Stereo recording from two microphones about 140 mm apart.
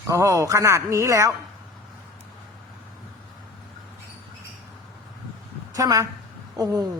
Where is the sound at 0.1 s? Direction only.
20° right (ahead or behind).